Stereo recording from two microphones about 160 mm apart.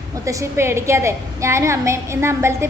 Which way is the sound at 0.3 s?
20° right (ahead or behind).